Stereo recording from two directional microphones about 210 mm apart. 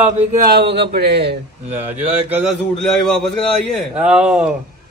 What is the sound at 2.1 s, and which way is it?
Speech, 10° right (ahead or behind).